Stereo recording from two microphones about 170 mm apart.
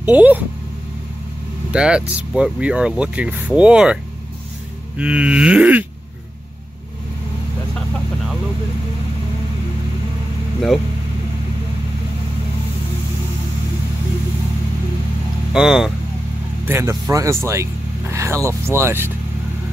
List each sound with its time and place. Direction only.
0.1 s speech: 10° right (ahead or behind)
1.7 s speech: 5° right (ahead or behind)
15.5 s speech: 5° right (ahead or behind)
16.6 s speech: 15° right (ahead or behind)